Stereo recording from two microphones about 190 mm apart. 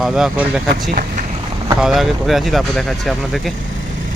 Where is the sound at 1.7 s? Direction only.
Centre (ahead or behind).